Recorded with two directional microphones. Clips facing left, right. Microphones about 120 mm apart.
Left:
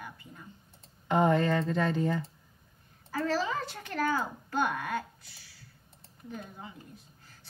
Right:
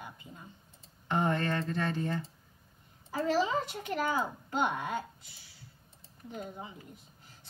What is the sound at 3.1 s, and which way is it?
A woman's voice, 20° right (ahead or behind).